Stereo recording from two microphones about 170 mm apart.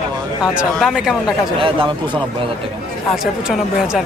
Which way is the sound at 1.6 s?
30° right (ahead or behind).